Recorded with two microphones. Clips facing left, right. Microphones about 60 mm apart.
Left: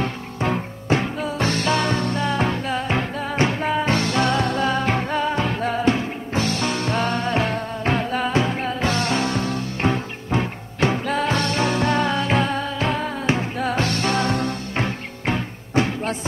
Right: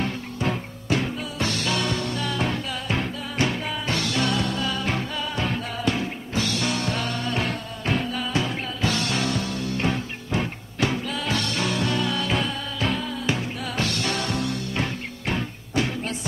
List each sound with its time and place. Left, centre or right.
0.4 s music: left